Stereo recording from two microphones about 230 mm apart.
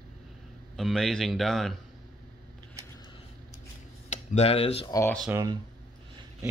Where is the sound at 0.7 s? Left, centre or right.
Centre.